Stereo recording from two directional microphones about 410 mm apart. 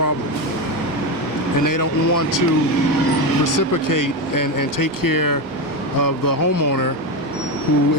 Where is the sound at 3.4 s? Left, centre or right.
Left.